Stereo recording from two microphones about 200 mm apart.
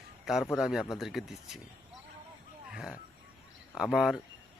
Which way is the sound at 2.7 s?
5° right (ahead or behind).